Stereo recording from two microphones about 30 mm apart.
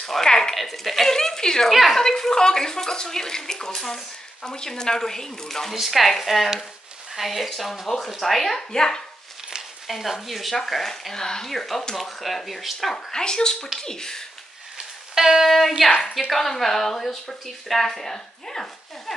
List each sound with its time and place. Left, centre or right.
0.2 s speech: centre
0.6 s speech: centre
1.0 s speech: centre
1.7 s speech: centre
2.0 s speech: centre
5.8 s speech: centre
8.5 s speech: centre
9.8 s speech: centre
11.1 s speech: left
11.4 s speech: centre
12.9 s speech: left
15.1 s a sound: centre
15.8 s a woman's voice: centre
16.3 s speech: centre